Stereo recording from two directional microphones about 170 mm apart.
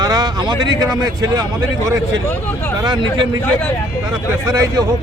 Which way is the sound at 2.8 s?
25° right (ahead or behind).